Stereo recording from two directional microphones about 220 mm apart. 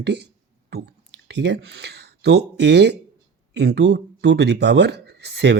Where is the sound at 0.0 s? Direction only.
50° right (ahead or behind).